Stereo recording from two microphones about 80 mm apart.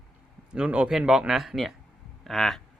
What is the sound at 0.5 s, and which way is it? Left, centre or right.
Speech, centre.